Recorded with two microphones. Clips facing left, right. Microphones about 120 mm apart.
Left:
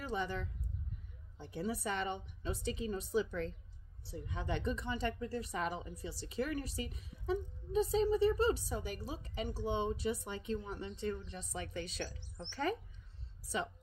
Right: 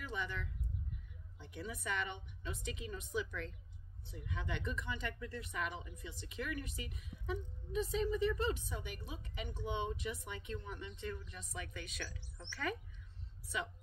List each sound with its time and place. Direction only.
0.0 s speech: 35° left (ahead or behind)